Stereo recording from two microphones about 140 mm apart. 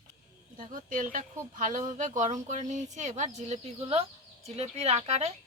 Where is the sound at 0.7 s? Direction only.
70° right (ahead or behind).